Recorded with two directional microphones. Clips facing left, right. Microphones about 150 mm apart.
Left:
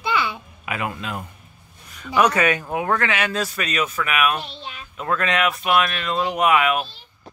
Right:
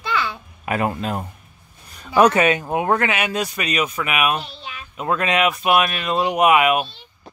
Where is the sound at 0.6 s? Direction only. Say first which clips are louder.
Right 6 dB; 40° right (ahead or behind).